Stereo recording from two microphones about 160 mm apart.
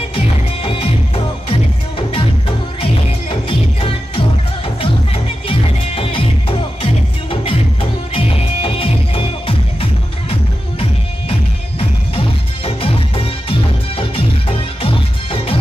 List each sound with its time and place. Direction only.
0.1 s music: 35° left (ahead or behind)
12.6 s music: 35° left (ahead or behind)